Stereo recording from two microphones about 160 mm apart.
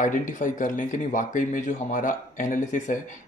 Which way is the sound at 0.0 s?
55° left (ahead or behind).